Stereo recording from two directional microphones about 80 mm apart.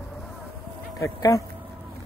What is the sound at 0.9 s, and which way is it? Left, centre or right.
Speech, left.